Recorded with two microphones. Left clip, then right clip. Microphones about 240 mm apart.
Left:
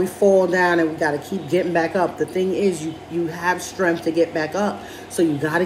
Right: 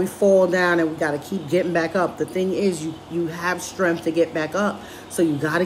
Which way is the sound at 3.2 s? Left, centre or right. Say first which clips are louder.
Left 4 dB; centre.